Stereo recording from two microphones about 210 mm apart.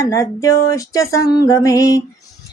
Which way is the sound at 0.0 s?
15° left (ahead or behind).